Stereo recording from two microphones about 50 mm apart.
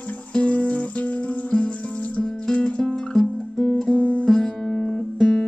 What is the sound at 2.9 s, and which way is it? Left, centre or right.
Music, centre.